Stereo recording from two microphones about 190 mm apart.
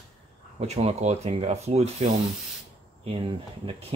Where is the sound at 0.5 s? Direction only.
35° right (ahead or behind).